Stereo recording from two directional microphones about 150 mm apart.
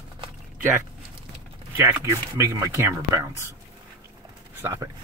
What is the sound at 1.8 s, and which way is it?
Speech, 20° right (ahead or behind).